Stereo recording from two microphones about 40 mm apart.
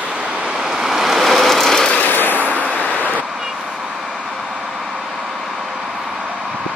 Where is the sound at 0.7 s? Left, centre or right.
Centre.